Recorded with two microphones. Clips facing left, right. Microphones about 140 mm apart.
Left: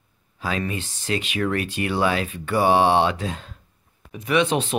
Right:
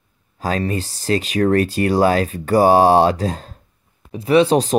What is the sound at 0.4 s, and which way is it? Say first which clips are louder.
Speech: right 5 dB; 40° right (ahead or behind).